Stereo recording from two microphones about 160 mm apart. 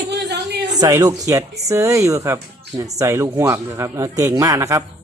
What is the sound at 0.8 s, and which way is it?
Speech, 20° right (ahead or behind).